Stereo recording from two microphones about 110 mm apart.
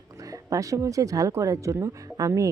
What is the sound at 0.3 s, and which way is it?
Speech, 30° right (ahead or behind).